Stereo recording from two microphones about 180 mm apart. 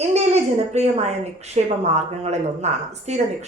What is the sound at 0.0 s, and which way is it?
A woman's voice, 35° right (ahead or behind).